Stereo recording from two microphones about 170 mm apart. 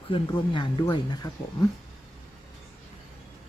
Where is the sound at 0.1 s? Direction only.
30° left (ahead or behind).